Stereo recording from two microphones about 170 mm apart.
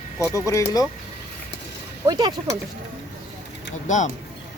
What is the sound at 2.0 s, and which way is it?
Speech, 25° right (ahead or behind).